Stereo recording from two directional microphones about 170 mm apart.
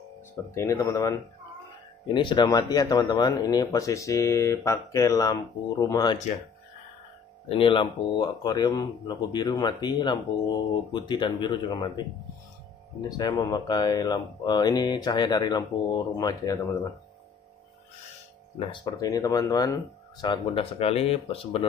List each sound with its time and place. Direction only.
0.6 s speech: 20° left (ahead or behind)
7.4 s speech: 30° left (ahead or behind)
13.2 s speech: 20° left (ahead or behind)
18.7 s speech: 25° left (ahead or behind)